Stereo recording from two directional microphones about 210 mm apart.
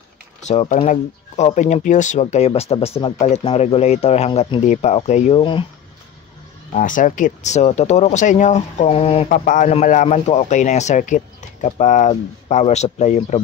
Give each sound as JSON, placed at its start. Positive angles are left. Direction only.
{"t": 0.5, "sound": "speech", "side_deg": 35}
{"t": 6.7, "sound": "speech", "side_deg": 40}
{"t": 9.3, "sound": "speech", "side_deg": 40}